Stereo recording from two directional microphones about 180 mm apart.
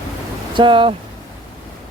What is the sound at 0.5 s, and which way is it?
Speech, 25° right (ahead or behind).